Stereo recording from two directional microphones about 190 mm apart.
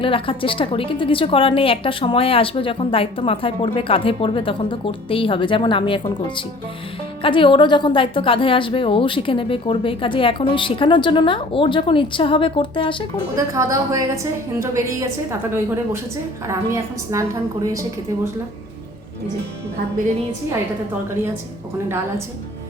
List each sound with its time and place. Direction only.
0.0 s a woman's voice: 25° left (ahead or behind)
13.3 s a woman's voice: 15° right (ahead or behind)